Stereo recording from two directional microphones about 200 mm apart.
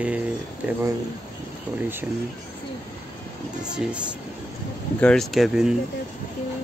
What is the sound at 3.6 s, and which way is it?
Speech, 5° right (ahead or behind).